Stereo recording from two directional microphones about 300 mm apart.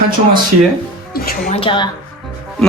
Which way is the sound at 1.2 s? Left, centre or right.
Left.